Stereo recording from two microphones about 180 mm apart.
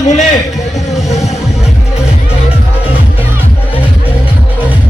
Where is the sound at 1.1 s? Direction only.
35° left (ahead or behind).